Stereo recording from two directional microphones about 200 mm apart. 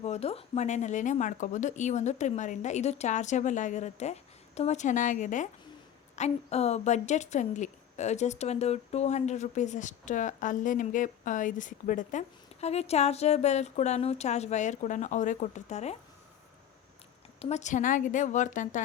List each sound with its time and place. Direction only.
0.0 s a woman's voice: 30° left (ahead or behind)
17.4 s a woman's voice: 35° left (ahead or behind)